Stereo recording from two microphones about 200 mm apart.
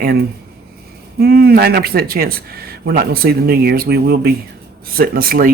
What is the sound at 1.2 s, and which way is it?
Speech, 50° right (ahead or behind).